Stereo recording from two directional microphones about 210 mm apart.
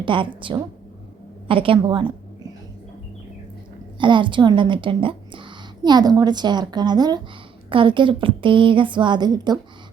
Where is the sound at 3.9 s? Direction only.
25° right (ahead or behind).